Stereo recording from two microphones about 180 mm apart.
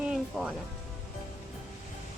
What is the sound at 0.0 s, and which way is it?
Music, 5° right (ahead or behind).